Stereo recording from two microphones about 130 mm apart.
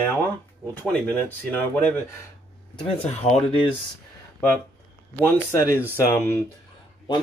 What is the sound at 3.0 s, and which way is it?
Speech, 60° left (ahead or behind).